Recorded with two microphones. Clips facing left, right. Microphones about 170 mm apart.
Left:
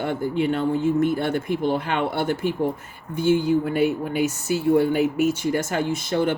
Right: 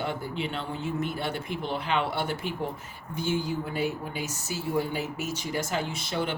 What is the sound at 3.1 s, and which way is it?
Speech, 60° left (ahead or behind).